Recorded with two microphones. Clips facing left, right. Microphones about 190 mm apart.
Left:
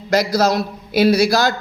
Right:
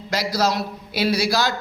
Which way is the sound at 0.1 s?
45° left (ahead or behind).